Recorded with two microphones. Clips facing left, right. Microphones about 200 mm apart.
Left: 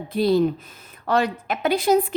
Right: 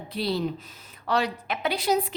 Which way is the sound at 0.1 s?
50° left (ahead or behind).